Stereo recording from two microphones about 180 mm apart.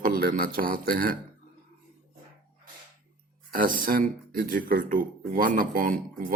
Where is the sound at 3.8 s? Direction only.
50° right (ahead or behind).